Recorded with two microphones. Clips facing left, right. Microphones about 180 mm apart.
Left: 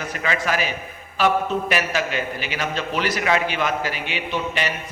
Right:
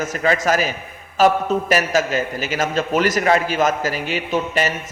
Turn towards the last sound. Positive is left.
turn(degrees=-45)  # may be behind; listen again after turning